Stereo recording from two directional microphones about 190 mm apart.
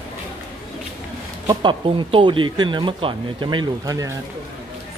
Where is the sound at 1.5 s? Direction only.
25° right (ahead or behind).